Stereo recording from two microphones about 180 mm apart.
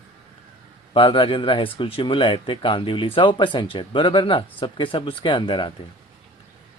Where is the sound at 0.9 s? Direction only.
30° left (ahead or behind).